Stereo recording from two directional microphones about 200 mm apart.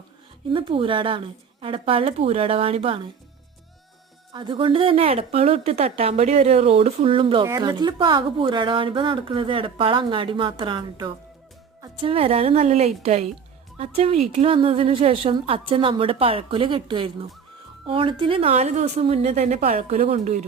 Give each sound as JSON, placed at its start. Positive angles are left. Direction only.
{"t": 0.5, "sound": "speech", "side_deg": -25}
{"t": 4.3, "sound": "a woman's voice", "side_deg": -25}